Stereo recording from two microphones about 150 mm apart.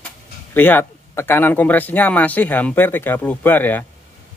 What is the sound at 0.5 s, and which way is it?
Speech, 10° left (ahead or behind).